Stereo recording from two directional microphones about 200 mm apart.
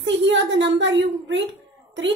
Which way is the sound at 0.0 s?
65° right (ahead or behind).